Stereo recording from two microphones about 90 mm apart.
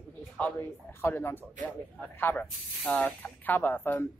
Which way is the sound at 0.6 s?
25° left (ahead or behind).